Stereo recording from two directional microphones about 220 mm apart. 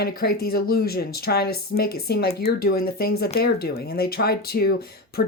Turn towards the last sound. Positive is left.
turn(degrees=45)  # may be behind; listen again after turning